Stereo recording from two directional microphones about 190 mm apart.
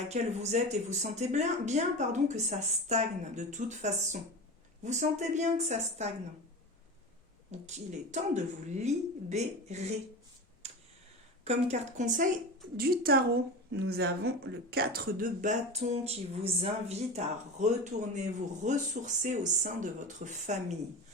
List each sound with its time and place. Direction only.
0.1 s speech: 35° right (ahead or behind)
7.5 s speech: 35° right (ahead or behind)
10.6 s a sound: 35° right (ahead or behind)
11.4 s speech: 35° right (ahead or behind)
12.7 s a woman's voice: 50° right (ahead or behind)